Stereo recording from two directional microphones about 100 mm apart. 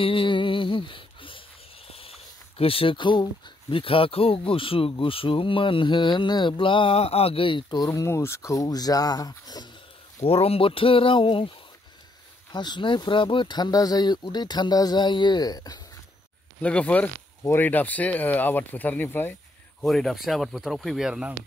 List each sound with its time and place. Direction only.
0.0 s a sound: 60° left (ahead or behind)
1.9 s speech: 75° left (ahead or behind); by 9.7 s 40° left (ahead or behind)
10.2 s speech: 80° left; by 11.5 s 60° left (ahead or behind)
12.5 s speech: 50° left (ahead or behind)
16.6 s speech: 15° left (ahead or behind)
17.4 s speech: 25° left (ahead or behind)
19.8 s speech: centre (ahead or behind)